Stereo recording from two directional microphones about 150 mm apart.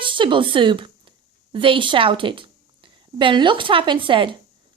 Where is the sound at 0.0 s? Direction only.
35° right (ahead or behind).